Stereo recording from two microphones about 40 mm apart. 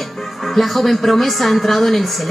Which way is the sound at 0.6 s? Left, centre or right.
Centre.